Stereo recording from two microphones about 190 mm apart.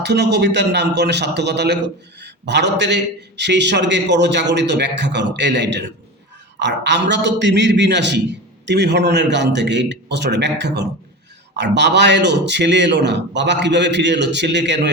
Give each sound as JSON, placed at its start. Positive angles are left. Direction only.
{"t": 0.0, "sound": "a man's voice", "side_deg": -65}